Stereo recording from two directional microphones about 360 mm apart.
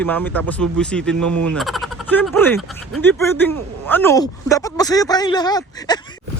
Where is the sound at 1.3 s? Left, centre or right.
Right.